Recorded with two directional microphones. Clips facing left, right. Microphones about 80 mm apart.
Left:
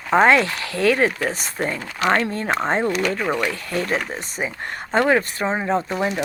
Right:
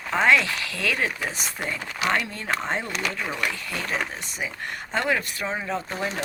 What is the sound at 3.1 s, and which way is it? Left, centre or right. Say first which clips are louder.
Speech: left 8 dB; left.